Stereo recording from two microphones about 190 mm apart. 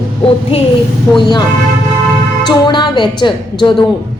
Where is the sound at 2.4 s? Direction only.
25° left (ahead or behind).